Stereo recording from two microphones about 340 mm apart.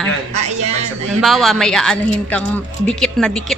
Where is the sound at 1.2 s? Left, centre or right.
Centre.